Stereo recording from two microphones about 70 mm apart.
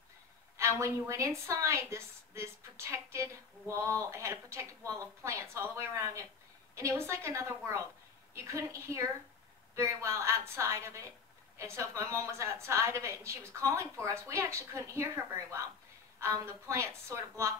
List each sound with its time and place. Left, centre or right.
0.6 s a woman's voice: right